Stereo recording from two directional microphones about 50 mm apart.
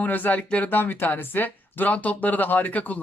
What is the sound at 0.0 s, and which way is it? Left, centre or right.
Speech, left.